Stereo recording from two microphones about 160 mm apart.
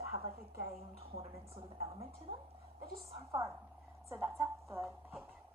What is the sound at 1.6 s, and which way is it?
Speech, 35° right (ahead or behind).